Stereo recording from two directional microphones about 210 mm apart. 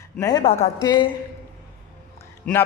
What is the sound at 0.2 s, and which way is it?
Speech, 20° left (ahead or behind).